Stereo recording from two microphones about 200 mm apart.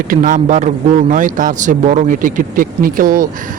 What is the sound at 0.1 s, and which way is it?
A man's voice, 45° right (ahead or behind).